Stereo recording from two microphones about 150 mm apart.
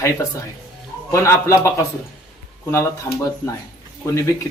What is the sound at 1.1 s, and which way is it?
A man's voice, 20° left (ahead or behind).